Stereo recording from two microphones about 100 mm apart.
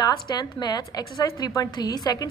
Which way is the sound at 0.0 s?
40° left (ahead or behind).